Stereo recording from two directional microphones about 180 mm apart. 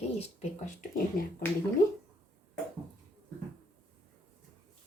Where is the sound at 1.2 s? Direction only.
50° left (ahead or behind).